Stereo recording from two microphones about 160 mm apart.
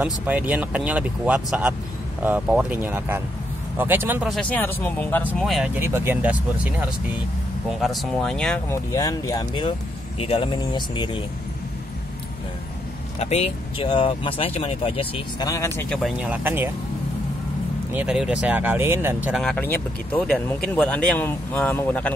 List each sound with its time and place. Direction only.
0.0 s speech: 10° right (ahead or behind)
4.3 s speech: 5° left (ahead or behind)
5.5 s speech: 10° right (ahead or behind)
7.8 s speech: centre (ahead or behind)
8.6 s speech: 20° left (ahead or behind)
13.2 s speech: 40° left (ahead or behind)
15.4 s speech: 20° left (ahead or behind)
16.0 s speech: 10° right (ahead or behind)
17.9 s speech: 5° right (ahead or behind)
19.3 s speech: 5° left (ahead or behind)